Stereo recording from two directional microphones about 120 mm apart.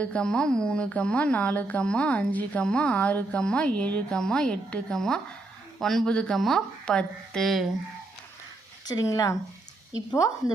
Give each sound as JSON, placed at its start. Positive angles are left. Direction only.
{"t": 0.0, "sound": "a woman's voice", "side_deg": 10}
{"t": 8.9, "sound": "speech", "side_deg": 35}